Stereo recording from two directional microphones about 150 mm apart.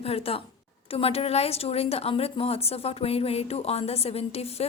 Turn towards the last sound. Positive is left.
turn(degrees=45)  # may be behind; listen again after turning